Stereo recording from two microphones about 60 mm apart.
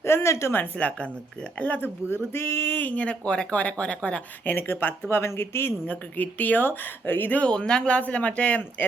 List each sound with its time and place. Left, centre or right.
0.0 s a woman's voice: left
0.8 s speech: centre
2.3 s speech: left
2.8 s speech: left
4.4 s speech: left
5.9 s speech: left
7.4 s speech: centre